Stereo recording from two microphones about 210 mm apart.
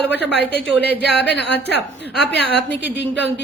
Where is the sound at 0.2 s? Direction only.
55° left (ahead or behind).